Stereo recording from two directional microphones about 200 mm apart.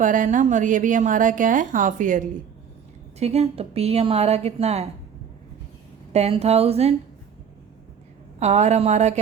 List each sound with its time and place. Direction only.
0.0 s a woman's voice: 40° right (ahead or behind)
6.1 s a woman's voice: 30° right (ahead or behind)
8.4 s a woman's voice: 35° right (ahead or behind)